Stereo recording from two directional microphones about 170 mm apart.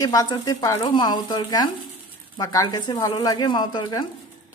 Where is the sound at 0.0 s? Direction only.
20° left (ahead or behind).